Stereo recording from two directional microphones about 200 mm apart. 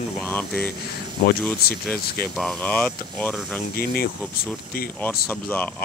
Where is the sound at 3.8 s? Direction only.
50° left (ahead or behind).